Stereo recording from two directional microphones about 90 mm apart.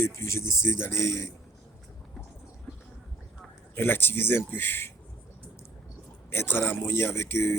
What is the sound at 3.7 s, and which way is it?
Speech, 25° left (ahead or behind).